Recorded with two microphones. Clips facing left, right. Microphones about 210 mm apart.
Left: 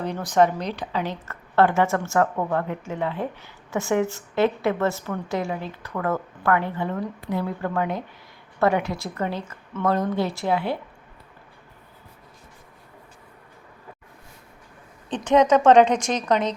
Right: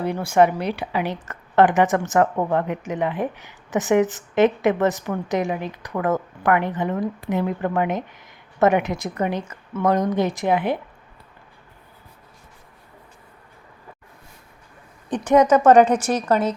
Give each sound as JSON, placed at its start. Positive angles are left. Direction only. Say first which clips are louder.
{"t": 0.0, "sound": "speech", "louder": "right 3 dB", "side_deg": -10}
{"t": 15.1, "sound": "speech", "louder": "right 2 dB", "side_deg": -10}